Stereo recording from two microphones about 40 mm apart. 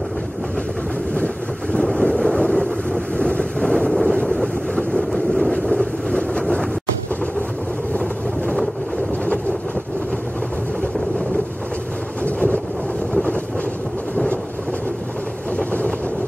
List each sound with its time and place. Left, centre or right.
1.1 s boat: left
1.8 s wind noise: centre
3.2 s vehicle: left
3.6 s wind noise: centre
4.4 s vehicle: centre
15.5 s vehicle: left